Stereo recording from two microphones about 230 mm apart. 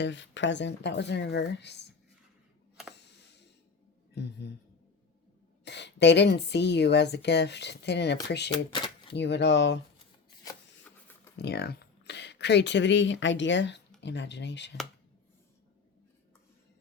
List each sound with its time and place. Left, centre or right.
0.0 s a woman's voice: left
2.9 s a sound: left
4.1 s a woman's voice: left
5.6 s a woman's voice: left
8.4 s speech: left
9.1 s a woman's voice: left
11.3 s a woman's voice: left